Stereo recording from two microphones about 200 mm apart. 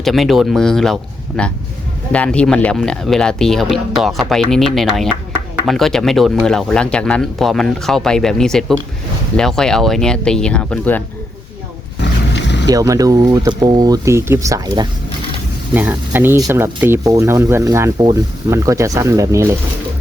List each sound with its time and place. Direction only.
0.0 s speech: centre (ahead or behind)
12.3 s boat: 60° left (ahead or behind)
12.6 s speech: 15° right (ahead or behind)